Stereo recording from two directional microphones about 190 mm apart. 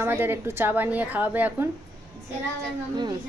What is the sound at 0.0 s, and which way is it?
A woman's voice, 10° right (ahead or behind).